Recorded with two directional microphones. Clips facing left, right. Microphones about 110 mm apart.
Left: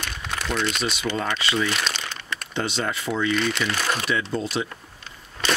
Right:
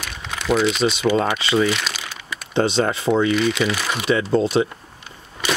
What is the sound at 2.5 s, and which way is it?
Speech, 30° right (ahead or behind).